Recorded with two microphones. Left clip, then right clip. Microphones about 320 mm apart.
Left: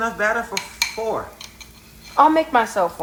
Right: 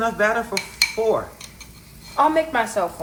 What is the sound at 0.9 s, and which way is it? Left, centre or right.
Cutlery, centre.